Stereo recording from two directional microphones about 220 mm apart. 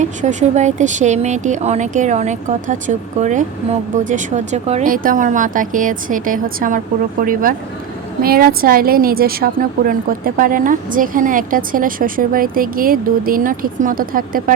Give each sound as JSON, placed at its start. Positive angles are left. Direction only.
{"t": 0.0, "sound": "a woman's voice", "side_deg": -35}
{"t": 8.2, "sound": "a woman's voice", "side_deg": -45}